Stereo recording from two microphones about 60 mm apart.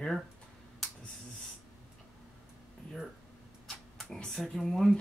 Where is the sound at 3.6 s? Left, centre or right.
Centre.